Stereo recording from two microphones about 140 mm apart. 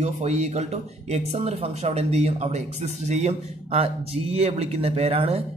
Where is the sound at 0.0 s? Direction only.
55° right (ahead or behind).